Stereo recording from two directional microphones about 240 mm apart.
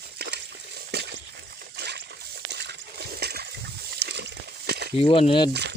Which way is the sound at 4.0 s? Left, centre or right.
Right.